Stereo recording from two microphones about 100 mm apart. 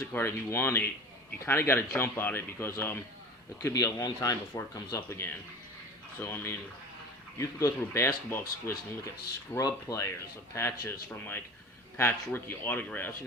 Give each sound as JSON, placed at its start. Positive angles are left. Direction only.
{"t": 0.1, "sound": "a man's voice", "side_deg": 25}
{"t": 4.9, "sound": "a man's voice", "side_deg": 25}
{"t": 9.6, "sound": "a man's voice", "side_deg": 35}